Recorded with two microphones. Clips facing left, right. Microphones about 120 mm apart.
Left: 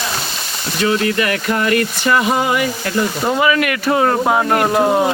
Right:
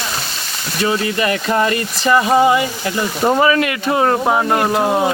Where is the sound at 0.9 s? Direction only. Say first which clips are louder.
Left 1 dB; 25° right (ahead or behind).